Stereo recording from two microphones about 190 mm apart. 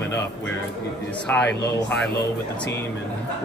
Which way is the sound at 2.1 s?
60° left (ahead or behind).